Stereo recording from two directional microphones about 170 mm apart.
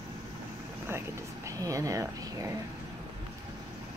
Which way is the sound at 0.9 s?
15° right (ahead or behind).